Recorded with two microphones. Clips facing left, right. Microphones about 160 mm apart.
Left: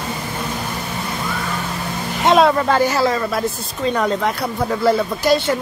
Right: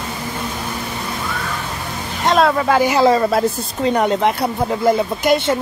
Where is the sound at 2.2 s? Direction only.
Centre (ahead or behind).